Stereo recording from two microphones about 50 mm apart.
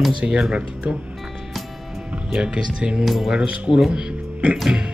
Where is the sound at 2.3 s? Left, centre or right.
Centre.